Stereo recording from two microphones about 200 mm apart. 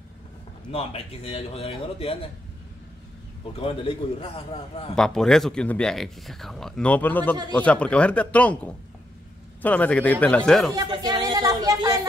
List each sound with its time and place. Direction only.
0.7 s a man's voice: 30° left (ahead or behind)
3.5 s a man's voice: 25° left (ahead or behind)
4.9 s speech: centre (ahead or behind)
10.7 s speech: 20° right (ahead or behind)